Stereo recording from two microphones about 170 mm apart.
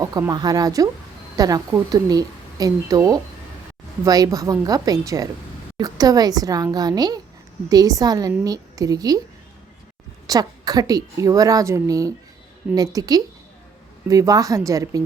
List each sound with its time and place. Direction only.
0.0 s a woman's voice: 20° right (ahead or behind)
10.2 s a woman's voice: 20° right (ahead or behind)